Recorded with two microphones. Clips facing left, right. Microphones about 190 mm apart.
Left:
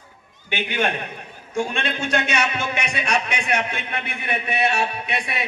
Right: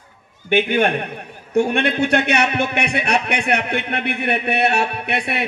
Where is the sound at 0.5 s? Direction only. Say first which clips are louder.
Right 7 dB; 55° right (ahead or behind).